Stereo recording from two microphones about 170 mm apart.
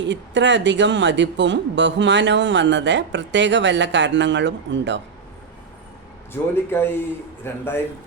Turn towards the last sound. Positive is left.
turn(degrees=15)  # may be behind; listen again after turning